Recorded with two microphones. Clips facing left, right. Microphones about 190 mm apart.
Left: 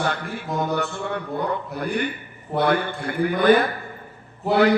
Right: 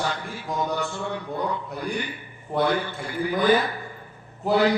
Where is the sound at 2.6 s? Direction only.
60° left (ahead or behind).